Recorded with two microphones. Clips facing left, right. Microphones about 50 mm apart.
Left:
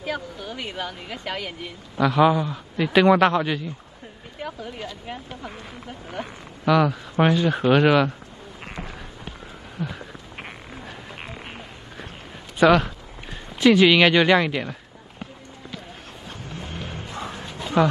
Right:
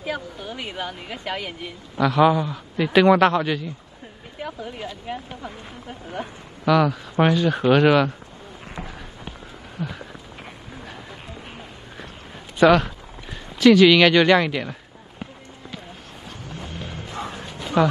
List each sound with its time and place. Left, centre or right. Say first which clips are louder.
0.0 s speech: even; centre
6.6 s speech: right 1 dB; centre
8.7 s run: even; left
9.8 s a sound: even; centre
12.5 s a sound: right 1 dB; centre
13.6 s speech: right 2 dB; centre
16.4 s vehicle: even; left
17.8 s speech: even; centre